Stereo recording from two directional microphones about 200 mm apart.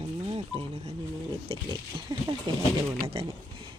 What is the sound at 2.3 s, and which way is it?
Speech, 25° right (ahead or behind).